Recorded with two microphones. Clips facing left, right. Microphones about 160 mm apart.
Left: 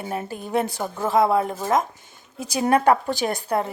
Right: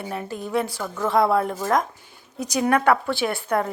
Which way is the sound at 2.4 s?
30° left (ahead or behind).